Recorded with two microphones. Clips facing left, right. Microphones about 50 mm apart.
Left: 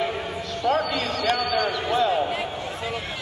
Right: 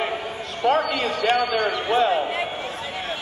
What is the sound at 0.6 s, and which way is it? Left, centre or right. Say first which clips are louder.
Speech: right 3 dB; right.